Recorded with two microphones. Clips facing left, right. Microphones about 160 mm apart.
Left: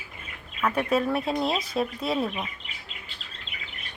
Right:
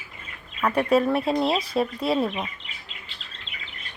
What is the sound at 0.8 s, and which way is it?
Speech, centre (ahead or behind).